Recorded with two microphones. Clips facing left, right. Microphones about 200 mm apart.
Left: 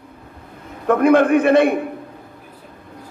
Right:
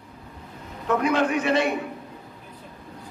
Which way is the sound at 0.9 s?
55° left (ahead or behind).